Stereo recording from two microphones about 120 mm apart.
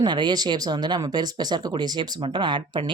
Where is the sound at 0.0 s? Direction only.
40° right (ahead or behind).